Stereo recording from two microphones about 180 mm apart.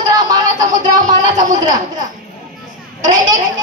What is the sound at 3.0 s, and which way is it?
Speech, 20° right (ahead or behind).